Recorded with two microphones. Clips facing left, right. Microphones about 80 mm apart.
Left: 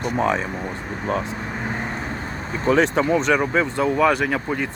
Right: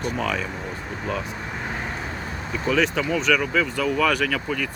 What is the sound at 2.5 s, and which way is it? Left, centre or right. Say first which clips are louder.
Speech: left 4 dB; left.